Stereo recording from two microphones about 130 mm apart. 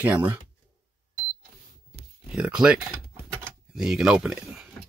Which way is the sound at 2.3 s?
5° right (ahead or behind).